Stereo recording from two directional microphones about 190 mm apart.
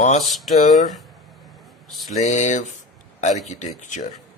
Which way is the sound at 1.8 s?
Centre (ahead or behind).